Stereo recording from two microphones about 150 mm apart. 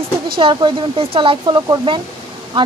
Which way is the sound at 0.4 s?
35° right (ahead or behind).